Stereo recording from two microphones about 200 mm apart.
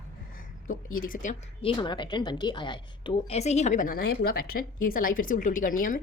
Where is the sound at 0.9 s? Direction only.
45° left (ahead or behind).